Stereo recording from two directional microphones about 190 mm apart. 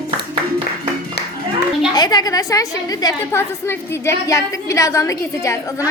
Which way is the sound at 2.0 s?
20° left (ahead or behind).